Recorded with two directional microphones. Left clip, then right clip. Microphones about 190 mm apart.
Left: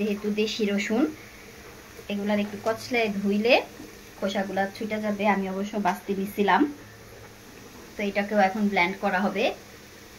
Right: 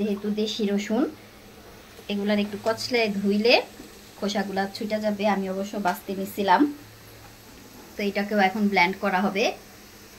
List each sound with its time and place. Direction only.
0.4 s a woman's voice: 15° right (ahead or behind)
2.0 s a woman's voice: 15° right (ahead or behind)
8.0 s a woman's voice: 15° right (ahead or behind)